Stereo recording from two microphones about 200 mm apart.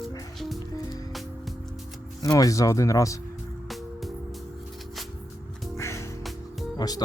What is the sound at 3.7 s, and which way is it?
Music, centre (ahead or behind).